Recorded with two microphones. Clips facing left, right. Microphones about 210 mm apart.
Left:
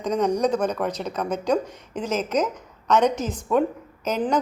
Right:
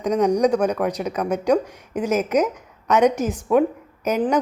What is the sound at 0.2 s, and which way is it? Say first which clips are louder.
A woman's voice: right 4 dB; 15° right (ahead or behind).